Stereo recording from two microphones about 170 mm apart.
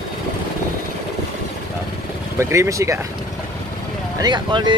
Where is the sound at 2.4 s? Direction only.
15° right (ahead or behind).